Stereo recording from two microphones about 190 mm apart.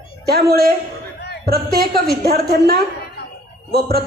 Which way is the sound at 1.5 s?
55° right (ahead or behind).